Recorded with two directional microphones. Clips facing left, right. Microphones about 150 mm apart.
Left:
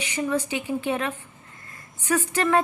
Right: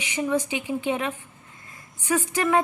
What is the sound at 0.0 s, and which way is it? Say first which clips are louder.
A woman's voice: right 1 dB; 15° right (ahead or behind).